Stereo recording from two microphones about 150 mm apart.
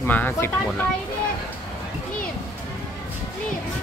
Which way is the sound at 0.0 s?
15° left (ahead or behind).